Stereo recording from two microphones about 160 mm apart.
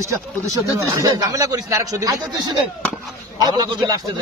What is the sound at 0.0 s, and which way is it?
Speech, 20° right (ahead or behind).